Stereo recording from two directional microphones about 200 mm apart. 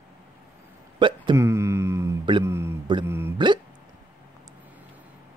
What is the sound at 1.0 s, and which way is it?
Hiccup, 25° right (ahead or behind).